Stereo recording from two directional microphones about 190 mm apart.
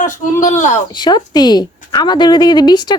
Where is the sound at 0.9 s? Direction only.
25° left (ahead or behind).